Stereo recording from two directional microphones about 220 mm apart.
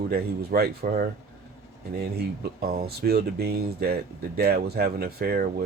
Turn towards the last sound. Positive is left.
turn(degrees=-45)  # may be behind; listen again after turning